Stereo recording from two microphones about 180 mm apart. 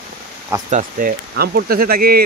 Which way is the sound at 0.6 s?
45° right (ahead or behind).